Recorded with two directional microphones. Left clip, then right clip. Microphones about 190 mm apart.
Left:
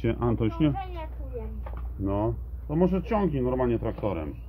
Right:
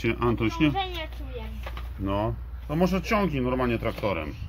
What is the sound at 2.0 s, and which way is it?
Speech, centre (ahead or behind).